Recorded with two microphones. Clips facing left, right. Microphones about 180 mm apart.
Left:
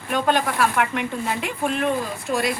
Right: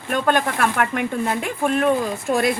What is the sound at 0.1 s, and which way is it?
A woman's voice, 50° right (ahead or behind).